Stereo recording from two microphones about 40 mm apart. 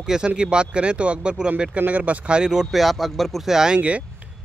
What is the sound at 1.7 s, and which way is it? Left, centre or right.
Speech, right.